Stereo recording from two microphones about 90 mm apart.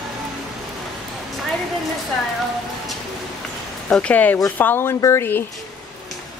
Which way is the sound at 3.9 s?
15° left (ahead or behind).